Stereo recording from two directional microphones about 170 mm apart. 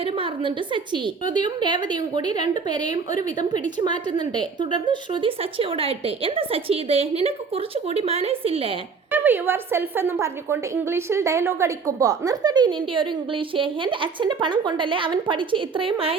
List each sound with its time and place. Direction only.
0.0 s a woman's voice: 30° right (ahead or behind)
9.1 s a woman's voice: 10° right (ahead or behind); by 16.1 s 30° right (ahead or behind)